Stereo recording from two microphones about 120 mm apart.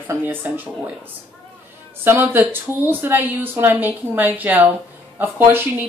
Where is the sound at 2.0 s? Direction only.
20° right (ahead or behind).